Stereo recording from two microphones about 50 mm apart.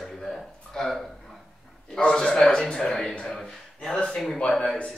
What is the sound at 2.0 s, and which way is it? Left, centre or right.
Speech, centre.